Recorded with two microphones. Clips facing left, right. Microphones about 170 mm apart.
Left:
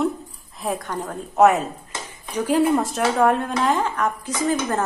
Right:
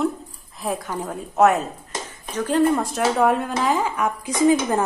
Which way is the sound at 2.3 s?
10° left (ahead or behind).